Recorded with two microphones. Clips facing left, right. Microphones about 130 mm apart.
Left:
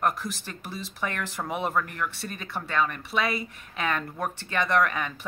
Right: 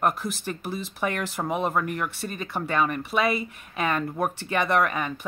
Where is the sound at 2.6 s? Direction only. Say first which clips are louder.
Right 3 dB; 15° right (ahead or behind).